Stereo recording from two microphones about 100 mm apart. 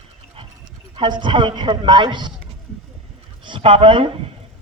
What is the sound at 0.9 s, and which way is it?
Speech, 50° right (ahead or behind).